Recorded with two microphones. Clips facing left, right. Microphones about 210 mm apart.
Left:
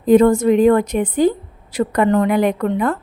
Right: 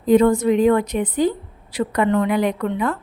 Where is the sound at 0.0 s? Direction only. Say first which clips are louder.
Left 3 dB; 50° left (ahead or behind).